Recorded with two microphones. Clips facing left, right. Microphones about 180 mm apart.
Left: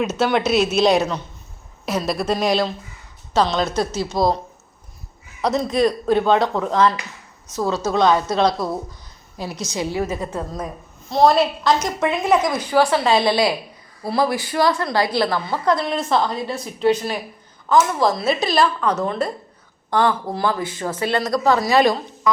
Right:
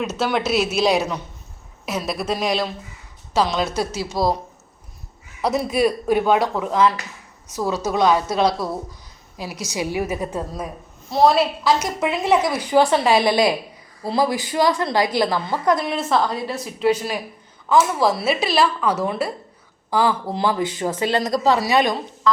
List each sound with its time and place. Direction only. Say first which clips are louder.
0.0 s a woman's voice: left 3 dB; centre (ahead or behind)
5.4 s a woman's voice: left 1 dB; 10° right (ahead or behind)
8.5 s speech: left 2 dB; 15° left (ahead or behind)
9.4 s a woman's voice: left 1 dB; 10° right (ahead or behind)
21.3 s a woman's voice: left 1 dB; 30° right (ahead or behind)
21.6 s speech: left 2 dB; 5° right (ahead or behind)